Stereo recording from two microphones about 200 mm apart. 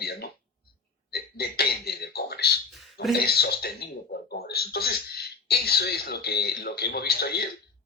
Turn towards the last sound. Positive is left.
turn(degrees=50)  # may be behind; listen again after turning